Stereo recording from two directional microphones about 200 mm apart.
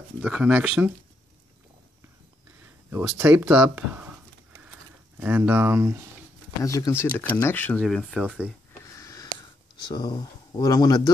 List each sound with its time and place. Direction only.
0.2 s speech: 5° right (ahead or behind)
2.6 s a sound: 10° right (ahead or behind)
5.2 s speech: 10° right (ahead or behind)
6.6 s speech: 15° left (ahead or behind)
7.8 s speech: centre (ahead or behind)
8.9 s a sound: 15° left (ahead or behind)
9.8 s speech: 20° left (ahead or behind)